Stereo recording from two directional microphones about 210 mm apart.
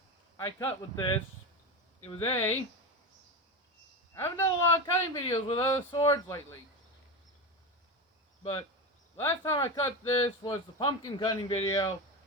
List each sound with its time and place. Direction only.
0.3 s a man's voice: 15° left (ahead or behind)
4.1 s a man's voice: 15° left (ahead or behind)
9.1 s a man's voice: 15° left (ahead or behind)